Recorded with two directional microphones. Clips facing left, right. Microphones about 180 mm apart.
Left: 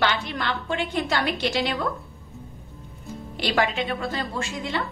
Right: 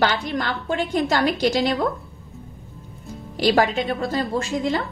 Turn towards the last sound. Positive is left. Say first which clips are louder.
# right 6 dB
turn(degrees=-40)  # may be behind; listen again after turning